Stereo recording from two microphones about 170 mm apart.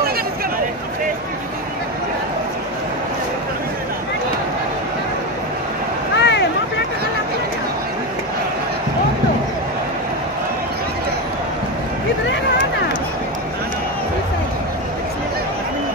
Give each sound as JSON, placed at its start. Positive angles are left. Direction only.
{"t": 6.1, "sound": "vehicle", "side_deg": 90}